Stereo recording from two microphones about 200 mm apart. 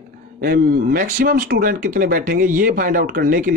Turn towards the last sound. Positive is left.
turn(degrees=-45)  # may be behind; listen again after turning